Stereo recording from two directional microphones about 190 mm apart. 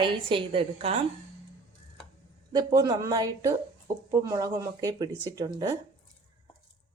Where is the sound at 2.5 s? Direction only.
20° right (ahead or behind).